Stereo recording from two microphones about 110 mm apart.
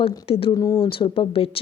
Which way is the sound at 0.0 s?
60° left (ahead or behind).